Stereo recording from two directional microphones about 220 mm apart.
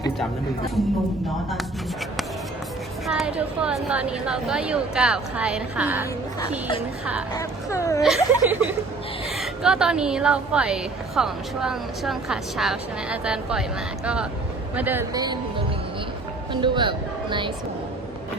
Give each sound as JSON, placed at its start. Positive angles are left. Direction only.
{"t": 3.1, "sound": "a woman's voice", "side_deg": -5}
{"t": 7.3, "sound": "speech", "side_deg": 15}
{"t": 8.0, "sound": "a woman's voice", "side_deg": -5}
{"t": 16.5, "sound": "speech", "side_deg": -20}